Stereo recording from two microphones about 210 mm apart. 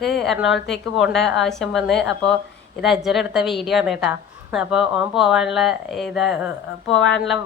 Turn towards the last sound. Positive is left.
turn(degrees=60)  # may be behind; listen again after turning